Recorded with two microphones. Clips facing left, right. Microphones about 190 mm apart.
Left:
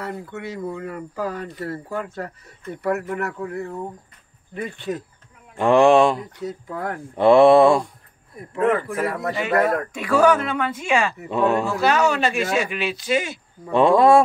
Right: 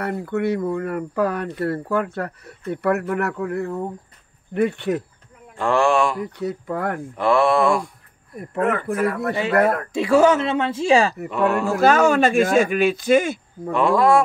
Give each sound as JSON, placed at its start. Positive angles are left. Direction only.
{"t": 0.0, "sound": "speech", "side_deg": -65}
{"t": 5.6, "sound": "speech", "side_deg": 20}
{"t": 6.1, "sound": "speech", "side_deg": -65}
{"t": 7.2, "sound": "speech", "side_deg": 25}
{"t": 9.4, "sound": "speech", "side_deg": -30}
{"t": 11.2, "sound": "speech", "side_deg": 20}
{"t": 11.6, "sound": "speech", "side_deg": -45}
{"t": 13.7, "sound": "speech", "side_deg": 25}